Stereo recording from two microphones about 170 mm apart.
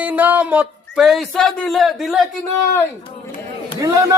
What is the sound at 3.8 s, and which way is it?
Speech, 20° right (ahead or behind).